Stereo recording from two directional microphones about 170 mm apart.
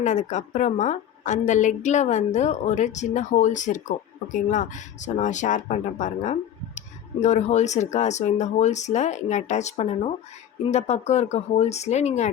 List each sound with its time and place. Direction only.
0.0 s a woman's voice: 45° left (ahead or behind)